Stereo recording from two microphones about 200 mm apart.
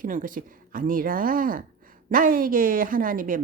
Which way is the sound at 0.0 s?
40° right (ahead or behind).